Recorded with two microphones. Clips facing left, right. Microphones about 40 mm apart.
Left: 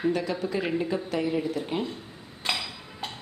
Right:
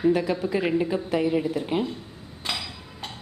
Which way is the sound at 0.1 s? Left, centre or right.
Centre.